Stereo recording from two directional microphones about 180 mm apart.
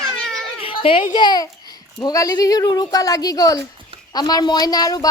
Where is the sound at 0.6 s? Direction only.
30° left (ahead or behind).